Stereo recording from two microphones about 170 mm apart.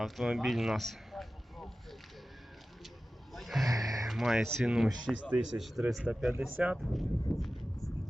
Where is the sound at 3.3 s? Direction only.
Centre (ahead or behind).